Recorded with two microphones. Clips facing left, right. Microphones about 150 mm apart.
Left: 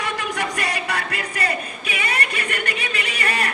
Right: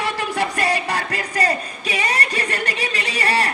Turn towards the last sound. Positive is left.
turn(degrees=-35)  # may be behind; listen again after turning